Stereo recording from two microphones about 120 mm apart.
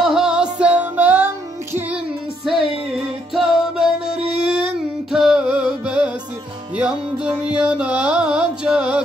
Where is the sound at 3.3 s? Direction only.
Centre (ahead or behind).